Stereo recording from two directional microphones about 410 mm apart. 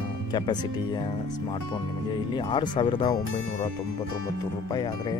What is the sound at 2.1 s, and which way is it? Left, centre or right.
Speech, centre.